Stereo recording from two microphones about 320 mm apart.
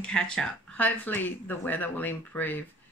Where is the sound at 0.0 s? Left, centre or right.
Centre.